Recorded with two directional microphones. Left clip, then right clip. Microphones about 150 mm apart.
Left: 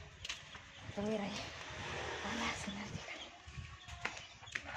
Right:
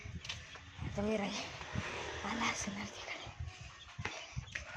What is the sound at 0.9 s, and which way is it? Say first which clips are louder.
Speech: right 3 dB; 20° right (ahead or behind).